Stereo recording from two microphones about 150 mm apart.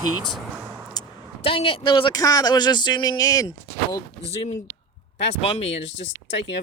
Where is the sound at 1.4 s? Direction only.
40° left (ahead or behind).